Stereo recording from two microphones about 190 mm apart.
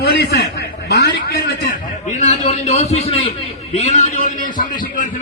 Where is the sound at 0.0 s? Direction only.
60° left (ahead or behind).